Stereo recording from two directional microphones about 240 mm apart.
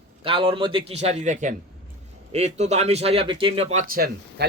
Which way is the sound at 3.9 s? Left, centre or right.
Right.